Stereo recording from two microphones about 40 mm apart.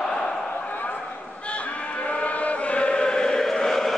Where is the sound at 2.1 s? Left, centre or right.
Left; by 3.5 s centre.